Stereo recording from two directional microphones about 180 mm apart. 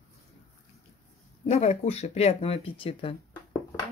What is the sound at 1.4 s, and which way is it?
Speech, 35° left (ahead or behind).